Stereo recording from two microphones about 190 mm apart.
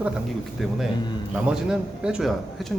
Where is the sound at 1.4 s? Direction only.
5° right (ahead or behind).